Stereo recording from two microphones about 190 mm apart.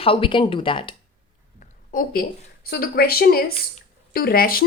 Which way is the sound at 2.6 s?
55° left (ahead or behind).